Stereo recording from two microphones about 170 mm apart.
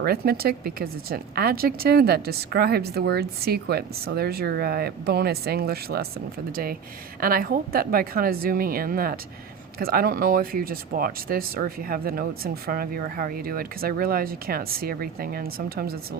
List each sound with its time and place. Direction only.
0.0 s speech: 65° right (ahead or behind)
7.2 s speech: 60° right (ahead or behind)